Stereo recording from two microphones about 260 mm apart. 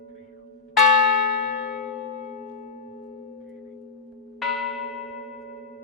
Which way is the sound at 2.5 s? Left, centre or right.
Left.